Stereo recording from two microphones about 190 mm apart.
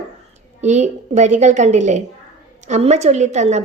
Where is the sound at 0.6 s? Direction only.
40° right (ahead or behind).